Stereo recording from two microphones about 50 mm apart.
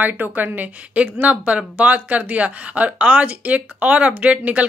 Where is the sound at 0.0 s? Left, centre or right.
Right.